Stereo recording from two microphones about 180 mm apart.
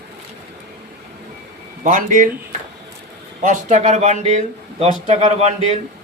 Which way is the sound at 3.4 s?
45° right (ahead or behind).